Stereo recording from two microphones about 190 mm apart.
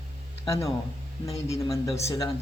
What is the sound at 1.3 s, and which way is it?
Speech, 30° left (ahead or behind).